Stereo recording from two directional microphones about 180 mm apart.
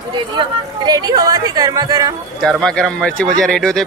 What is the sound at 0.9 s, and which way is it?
Speech, 20° right (ahead or behind).